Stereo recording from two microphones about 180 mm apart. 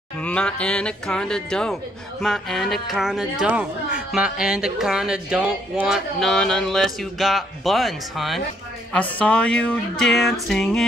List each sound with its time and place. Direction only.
0.2 s speech: 5° left (ahead or behind)